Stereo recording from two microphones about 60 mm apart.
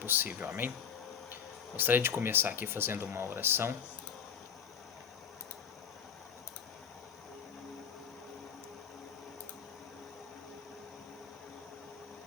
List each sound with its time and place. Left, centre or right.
0.0 s speech: right